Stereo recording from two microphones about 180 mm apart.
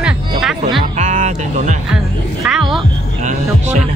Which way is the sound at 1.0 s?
45° right (ahead or behind).